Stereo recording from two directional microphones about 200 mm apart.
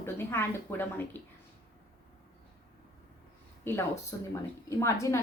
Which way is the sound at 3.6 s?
10° left (ahead or behind).